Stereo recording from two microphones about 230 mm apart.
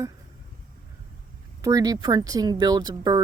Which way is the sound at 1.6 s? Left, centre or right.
Centre.